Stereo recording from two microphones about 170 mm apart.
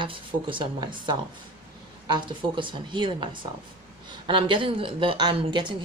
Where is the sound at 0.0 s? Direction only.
30° right (ahead or behind).